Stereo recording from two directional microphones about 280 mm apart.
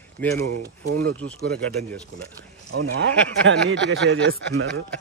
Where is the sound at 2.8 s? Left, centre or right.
Right.